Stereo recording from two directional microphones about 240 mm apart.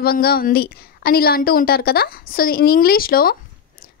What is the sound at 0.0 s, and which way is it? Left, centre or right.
A woman's voice, left.